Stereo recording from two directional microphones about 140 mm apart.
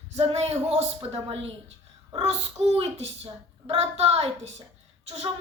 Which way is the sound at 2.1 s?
45° right (ahead or behind).